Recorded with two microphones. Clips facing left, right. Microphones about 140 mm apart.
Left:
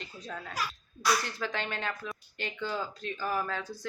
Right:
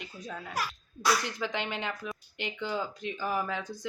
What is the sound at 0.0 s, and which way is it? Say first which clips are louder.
Speech: right 1 dB; 10° right (ahead or behind).